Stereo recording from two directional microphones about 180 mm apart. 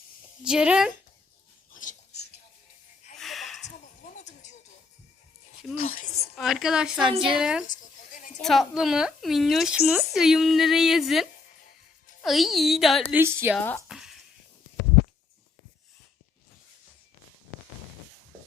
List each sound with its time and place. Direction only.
0.4 s speech: 5° right (ahead or behind)
1.7 s a sound: 45° left (ahead or behind)
3.2 s a sound: centre (ahead or behind)
4.2 s music: 40° left (ahead or behind)
5.7 s a woman's voice: 50° left (ahead or behind)
6.3 s speech: centre (ahead or behind)
7.7 s goat: 45° left (ahead or behind)
8.4 s speech: centre (ahead or behind)
13.1 s a woman's voice: 10° right (ahead or behind)
13.6 s speech: 10° left (ahead or behind)
13.8 s frying: centre (ahead or behind)